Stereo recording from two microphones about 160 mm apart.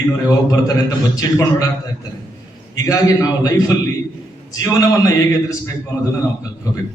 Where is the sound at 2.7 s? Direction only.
20° left (ahead or behind).